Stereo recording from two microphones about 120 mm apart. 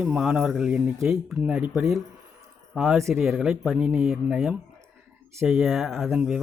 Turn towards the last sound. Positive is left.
turn(degrees=-10)  # may be behind; listen again after turning